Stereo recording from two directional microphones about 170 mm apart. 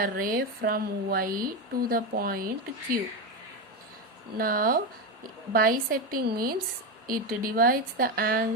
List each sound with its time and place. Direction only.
0.0 s speech: 60° right (ahead or behind)
4.4 s speech: 60° right (ahead or behind)